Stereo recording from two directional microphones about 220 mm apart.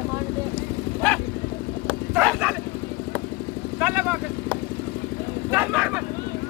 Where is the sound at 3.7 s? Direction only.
10° right (ahead or behind).